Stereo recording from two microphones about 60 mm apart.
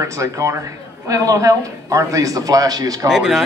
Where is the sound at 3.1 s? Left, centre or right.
Centre.